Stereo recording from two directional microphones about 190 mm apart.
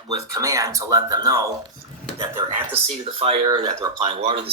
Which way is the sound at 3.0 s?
30° right (ahead or behind).